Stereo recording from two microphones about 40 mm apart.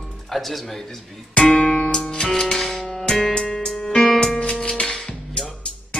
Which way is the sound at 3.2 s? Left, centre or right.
Centre.